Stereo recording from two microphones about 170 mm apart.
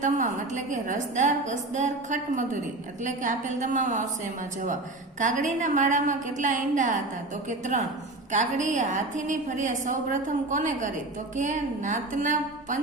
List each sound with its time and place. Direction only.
0.0 s a woman's voice: 45° right (ahead or behind)
5.2 s a woman's voice: 50° right (ahead or behind)